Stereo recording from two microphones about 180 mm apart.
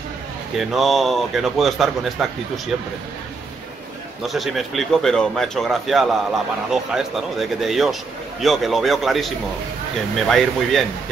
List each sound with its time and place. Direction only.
0.6 s a man's voice: centre (ahead or behind)
4.3 s a man's voice: centre (ahead or behind)